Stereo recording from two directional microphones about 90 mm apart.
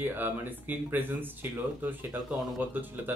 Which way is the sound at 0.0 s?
20° right (ahead or behind).